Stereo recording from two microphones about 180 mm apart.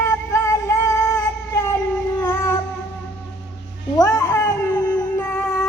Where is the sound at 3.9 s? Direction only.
15° left (ahead or behind).